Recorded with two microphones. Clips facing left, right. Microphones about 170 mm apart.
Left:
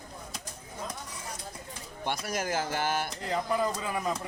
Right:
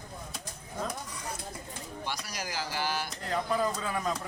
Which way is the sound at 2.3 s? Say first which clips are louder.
Left 6 dB; 50° left (ahead or behind).